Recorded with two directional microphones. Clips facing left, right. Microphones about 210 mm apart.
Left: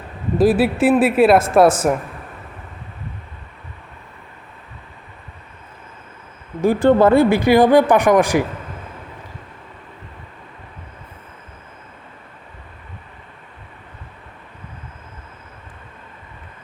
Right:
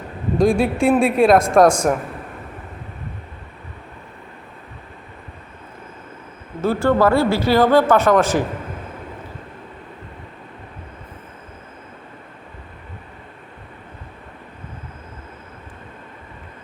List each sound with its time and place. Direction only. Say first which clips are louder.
0.3 s a woman's voice: left 2 dB; 5° left (ahead or behind)
6.6 s speech: left 3 dB; 15° left (ahead or behind)